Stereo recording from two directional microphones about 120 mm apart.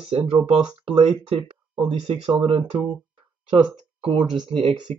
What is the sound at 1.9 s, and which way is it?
Speech, 50° right (ahead or behind).